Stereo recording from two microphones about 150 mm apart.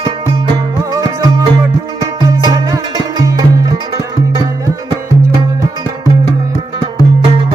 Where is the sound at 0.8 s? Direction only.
20° right (ahead or behind).